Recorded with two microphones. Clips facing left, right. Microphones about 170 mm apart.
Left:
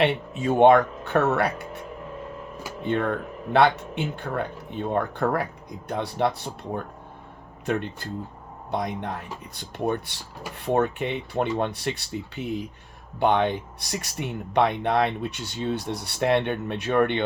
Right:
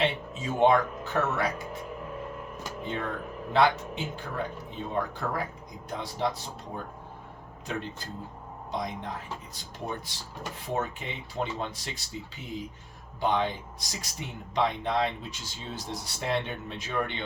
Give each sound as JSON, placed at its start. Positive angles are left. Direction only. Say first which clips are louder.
{"t": 0.0, "sound": "speech", "louder": "left 6 dB", "side_deg": 65}
{"t": 2.8, "sound": "speech", "louder": "left 9 dB", "side_deg": 60}
{"t": 7.6, "sound": "speech", "louder": "left 8 dB", "side_deg": 60}
{"t": 13.1, "sound": "speech", "louder": "left 6 dB", "side_deg": 65}